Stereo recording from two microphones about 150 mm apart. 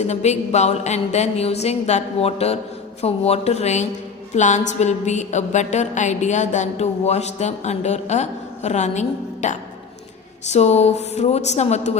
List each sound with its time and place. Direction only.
0.1 s music: 50° left (ahead or behind)